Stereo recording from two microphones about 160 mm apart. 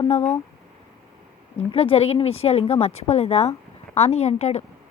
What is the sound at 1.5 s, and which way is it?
Speech, 40° left (ahead or behind).